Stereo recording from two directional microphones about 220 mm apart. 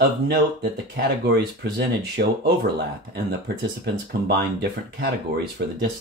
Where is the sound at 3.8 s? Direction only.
50° right (ahead or behind).